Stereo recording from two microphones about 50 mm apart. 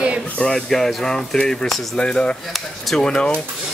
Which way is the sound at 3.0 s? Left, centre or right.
Centre.